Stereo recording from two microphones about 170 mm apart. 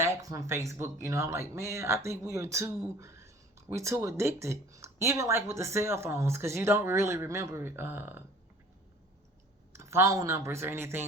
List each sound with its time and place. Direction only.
0.0 s speech: 20° right (ahead or behind)
9.7 s speech: 15° right (ahead or behind)